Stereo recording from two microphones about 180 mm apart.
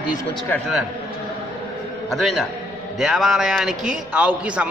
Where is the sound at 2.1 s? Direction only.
Centre (ahead or behind).